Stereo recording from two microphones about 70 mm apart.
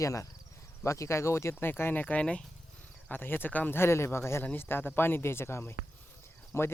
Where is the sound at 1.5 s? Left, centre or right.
Left.